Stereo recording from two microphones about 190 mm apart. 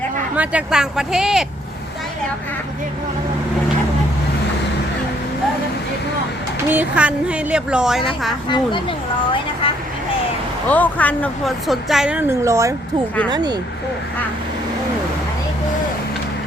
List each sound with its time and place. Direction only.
0.3 s a woman's voice: 5° right (ahead or behind)
6.7 s a woman's voice: 10° right (ahead or behind)
8.4 s speech: 25° left (ahead or behind)
10.7 s a woman's voice: 10° left (ahead or behind); by 13.6 s 20° right (ahead or behind)